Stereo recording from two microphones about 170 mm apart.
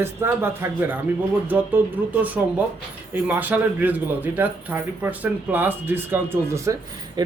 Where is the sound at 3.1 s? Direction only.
10° right (ahead or behind).